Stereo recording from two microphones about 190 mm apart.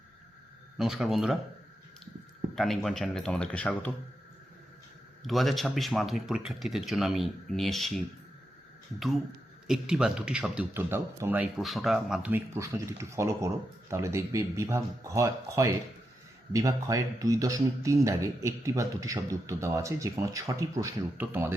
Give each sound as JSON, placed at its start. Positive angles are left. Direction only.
{"t": 0.8, "sound": "a man's voice", "side_deg": 0}
{"t": 2.6, "sound": "a man's voice", "side_deg": 0}
{"t": 5.2, "sound": "a man's voice", "side_deg": 0}
{"t": 9.6, "sound": "a man's voice", "side_deg": -5}